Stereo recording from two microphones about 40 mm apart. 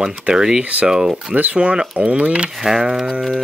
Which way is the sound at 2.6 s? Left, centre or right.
Centre.